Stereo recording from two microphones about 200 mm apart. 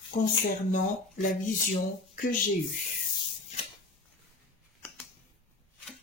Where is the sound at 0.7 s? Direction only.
40° left (ahead or behind).